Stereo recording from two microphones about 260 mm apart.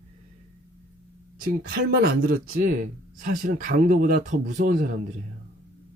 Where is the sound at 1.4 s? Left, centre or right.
Right.